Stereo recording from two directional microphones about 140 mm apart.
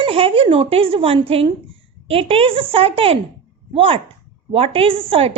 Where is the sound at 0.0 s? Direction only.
40° right (ahead or behind).